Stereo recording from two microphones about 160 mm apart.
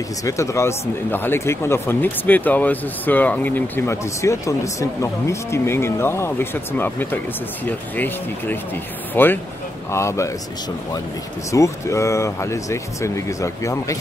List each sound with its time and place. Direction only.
0.2 s speech: 20° left (ahead or behind)
11.5 s speech: 20° left (ahead or behind)